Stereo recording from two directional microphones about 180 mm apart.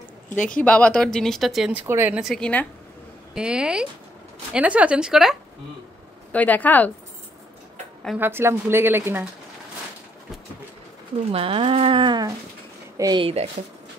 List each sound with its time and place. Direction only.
0.4 s speech: 5° left (ahead or behind)
6.3 s a woman's voice: 10° left (ahead or behind)
8.2 s speech: 15° right (ahead or behind)
11.3 s speech: 30° right (ahead or behind)